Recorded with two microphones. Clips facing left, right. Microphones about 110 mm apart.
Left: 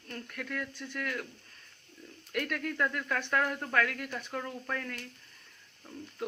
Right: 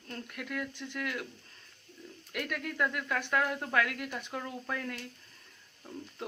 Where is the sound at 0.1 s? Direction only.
15° right (ahead or behind).